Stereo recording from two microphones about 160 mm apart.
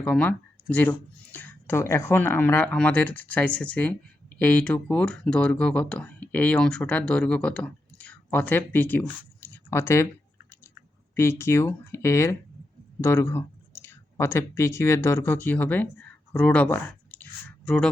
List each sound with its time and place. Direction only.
0.0 s speech: 10° left (ahead or behind)
11.1 s speech: 15° left (ahead or behind)